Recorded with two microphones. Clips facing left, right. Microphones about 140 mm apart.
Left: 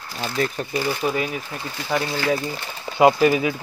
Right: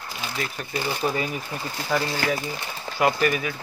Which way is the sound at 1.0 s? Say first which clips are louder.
Left 1 dB; 5° right (ahead or behind).